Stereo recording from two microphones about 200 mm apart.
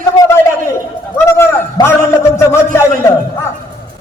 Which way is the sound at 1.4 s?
10° left (ahead or behind).